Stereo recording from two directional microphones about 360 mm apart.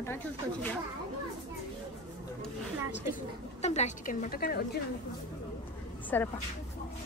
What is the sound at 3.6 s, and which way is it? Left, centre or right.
A woman's voice, centre.